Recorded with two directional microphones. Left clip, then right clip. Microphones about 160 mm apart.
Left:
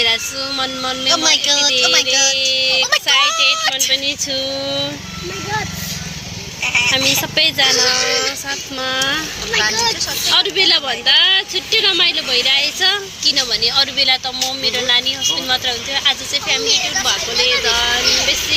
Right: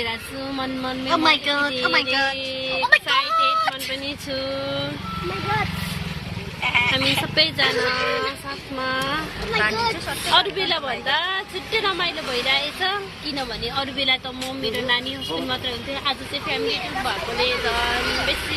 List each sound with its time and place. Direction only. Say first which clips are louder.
0.0 s speech: left 11 dB; centre (ahead or behind); by 4.9 s 20° right (ahead or behind)
6.7 s speech: left 5 dB; 20° right (ahead or behind)
10.2 s speech: left 6 dB; centre (ahead or behind)